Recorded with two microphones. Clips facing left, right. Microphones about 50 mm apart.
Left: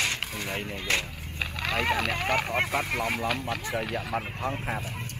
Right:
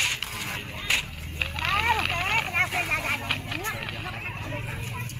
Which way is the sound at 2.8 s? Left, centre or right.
Right.